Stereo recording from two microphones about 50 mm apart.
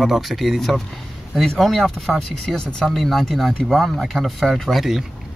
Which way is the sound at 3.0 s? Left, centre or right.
Centre.